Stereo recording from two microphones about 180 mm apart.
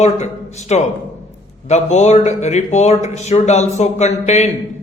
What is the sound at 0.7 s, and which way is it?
Speech, 35° left (ahead or behind).